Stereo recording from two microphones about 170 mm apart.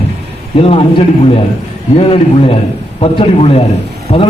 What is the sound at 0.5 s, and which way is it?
A man's voice, 35° left (ahead or behind).